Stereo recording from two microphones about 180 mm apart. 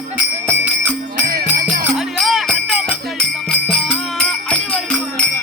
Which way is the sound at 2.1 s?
Centre (ahead or behind).